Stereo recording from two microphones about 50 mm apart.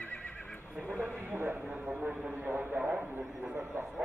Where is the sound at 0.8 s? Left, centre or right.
Right.